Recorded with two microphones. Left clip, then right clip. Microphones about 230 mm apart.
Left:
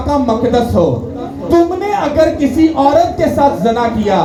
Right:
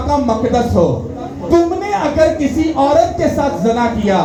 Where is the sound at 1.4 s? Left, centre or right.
Left.